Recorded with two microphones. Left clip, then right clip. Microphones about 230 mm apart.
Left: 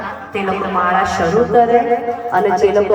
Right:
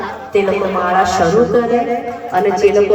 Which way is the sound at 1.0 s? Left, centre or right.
Centre.